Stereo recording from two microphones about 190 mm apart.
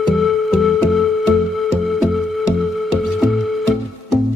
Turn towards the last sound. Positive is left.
turn(degrees=0)  # may be behind; listen again after turning